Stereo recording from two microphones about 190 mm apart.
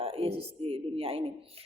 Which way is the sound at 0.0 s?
30° right (ahead or behind).